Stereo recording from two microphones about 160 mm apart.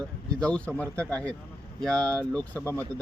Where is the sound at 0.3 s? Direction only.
5° left (ahead or behind).